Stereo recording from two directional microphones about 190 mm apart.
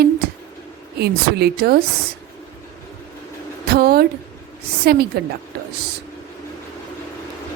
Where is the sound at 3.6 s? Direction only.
55° right (ahead or behind).